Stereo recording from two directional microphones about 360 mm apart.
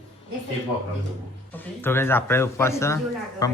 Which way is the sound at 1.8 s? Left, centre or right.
Centre.